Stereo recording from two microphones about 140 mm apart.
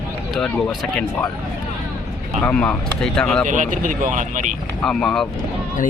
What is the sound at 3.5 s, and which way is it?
Speech, 65° right (ahead or behind).